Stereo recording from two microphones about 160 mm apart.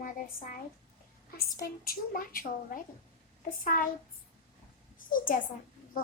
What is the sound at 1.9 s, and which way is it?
Speech, 65° left (ahead or behind).